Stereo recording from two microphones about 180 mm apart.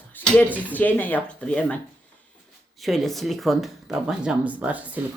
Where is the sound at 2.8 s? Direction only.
Centre (ahead or behind).